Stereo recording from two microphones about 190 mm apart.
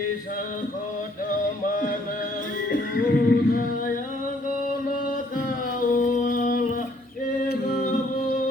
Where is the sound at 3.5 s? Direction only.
45° left (ahead or behind).